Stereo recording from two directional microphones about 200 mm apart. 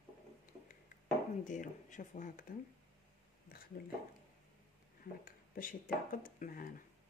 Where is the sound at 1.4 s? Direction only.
40° left (ahead or behind).